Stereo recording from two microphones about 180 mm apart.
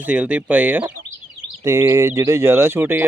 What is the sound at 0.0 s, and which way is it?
Speech, 10° right (ahead or behind).